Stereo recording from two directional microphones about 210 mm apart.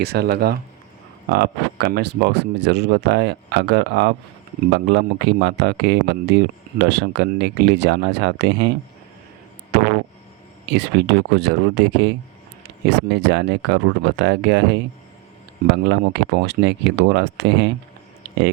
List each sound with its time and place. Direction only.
0.0 s speech: 50° right (ahead or behind)
9.7 s speech: 55° right (ahead or behind)
18.2 s a sound: 55° right (ahead or behind)